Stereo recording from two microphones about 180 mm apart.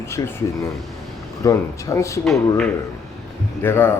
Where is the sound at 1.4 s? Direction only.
20° left (ahead or behind).